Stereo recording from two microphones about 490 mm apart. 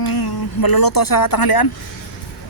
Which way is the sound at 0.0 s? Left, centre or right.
Left.